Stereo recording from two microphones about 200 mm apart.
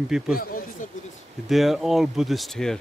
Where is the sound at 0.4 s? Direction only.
45° left (ahead or behind).